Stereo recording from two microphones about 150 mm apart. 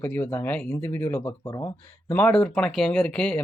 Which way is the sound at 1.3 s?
30° left (ahead or behind).